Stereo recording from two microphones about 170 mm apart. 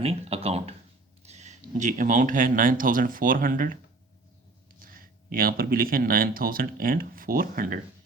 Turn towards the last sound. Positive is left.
turn(degrees=-55)  # may be behind; listen again after turning